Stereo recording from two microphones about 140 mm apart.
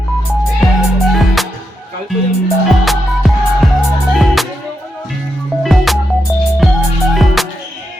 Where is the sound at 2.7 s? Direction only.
Centre (ahead or behind).